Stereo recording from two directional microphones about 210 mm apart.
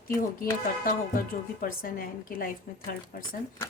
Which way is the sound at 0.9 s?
40° left (ahead or behind).